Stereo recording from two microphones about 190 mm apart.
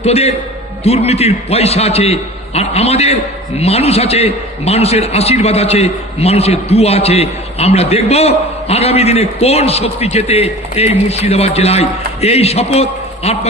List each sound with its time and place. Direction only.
0.0 s a man's voice: 35° left (ahead or behind)